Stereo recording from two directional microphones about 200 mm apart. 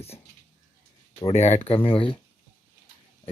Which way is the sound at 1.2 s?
35° left (ahead or behind).